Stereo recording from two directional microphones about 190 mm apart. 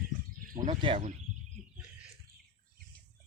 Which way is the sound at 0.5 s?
40° right (ahead or behind).